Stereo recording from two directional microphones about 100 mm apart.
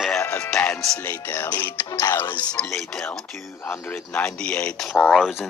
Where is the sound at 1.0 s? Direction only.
20° left (ahead or behind).